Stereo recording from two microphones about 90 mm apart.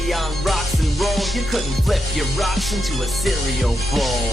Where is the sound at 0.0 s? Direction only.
Centre (ahead or behind).